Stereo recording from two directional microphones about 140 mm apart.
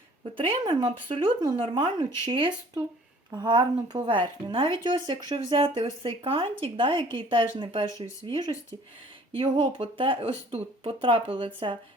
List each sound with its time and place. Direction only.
0.6 s speech: 30° right (ahead or behind)
7.9 s speech: 25° left (ahead or behind)
8.3 s speech: 35° right (ahead or behind)